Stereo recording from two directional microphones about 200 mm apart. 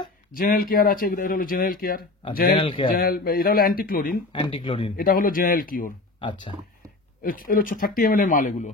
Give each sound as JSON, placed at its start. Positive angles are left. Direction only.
{"t": 0.3, "sound": "speech", "side_deg": 45}
{"t": 2.5, "sound": "speech", "side_deg": 25}
{"t": 2.9, "sound": "speech", "side_deg": 45}
{"t": 4.3, "sound": "speech", "side_deg": 25}
{"t": 4.9, "sound": "speech", "side_deg": 45}
{"t": 7.2, "sound": "speech", "side_deg": 45}